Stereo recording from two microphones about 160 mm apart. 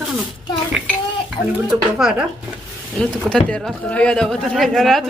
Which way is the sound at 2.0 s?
5° right (ahead or behind).